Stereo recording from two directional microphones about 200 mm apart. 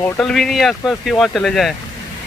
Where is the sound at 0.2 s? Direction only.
Centre (ahead or behind).